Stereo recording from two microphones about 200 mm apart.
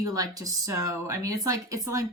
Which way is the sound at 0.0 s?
15° right (ahead or behind).